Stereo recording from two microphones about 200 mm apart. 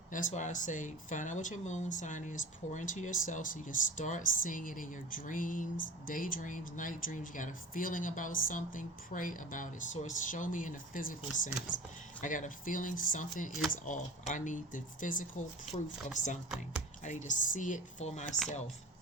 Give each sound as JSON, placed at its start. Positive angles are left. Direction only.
{"t": 0.1, "sound": "speech", "side_deg": 40}